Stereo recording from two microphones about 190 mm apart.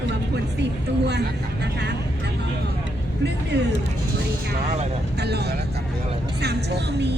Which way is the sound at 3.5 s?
60° right (ahead or behind).